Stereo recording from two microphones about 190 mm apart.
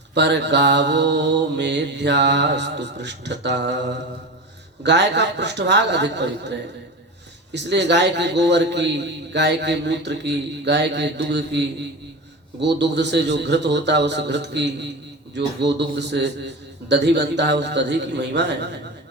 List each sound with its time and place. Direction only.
0.1 s a man's voice: 65° right (ahead or behind)
4.8 s a man's voice: 65° right (ahead or behind)